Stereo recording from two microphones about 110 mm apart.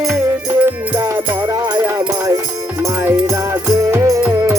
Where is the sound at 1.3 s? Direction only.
45° right (ahead or behind).